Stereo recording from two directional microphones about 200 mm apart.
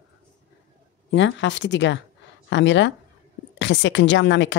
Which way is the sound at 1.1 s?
65° left (ahead or behind).